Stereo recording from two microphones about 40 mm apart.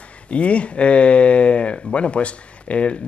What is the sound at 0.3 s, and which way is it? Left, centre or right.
Speech, left.